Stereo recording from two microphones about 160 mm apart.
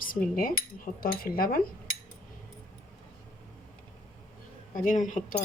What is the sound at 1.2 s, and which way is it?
Speech, 65° left (ahead or behind).